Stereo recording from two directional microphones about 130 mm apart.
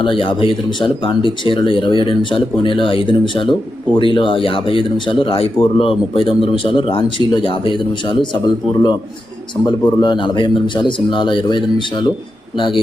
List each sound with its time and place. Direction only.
0.0 s speech: 40° left (ahead or behind)